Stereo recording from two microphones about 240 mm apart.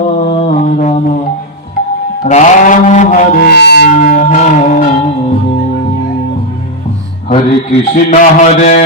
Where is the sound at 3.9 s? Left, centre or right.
Left.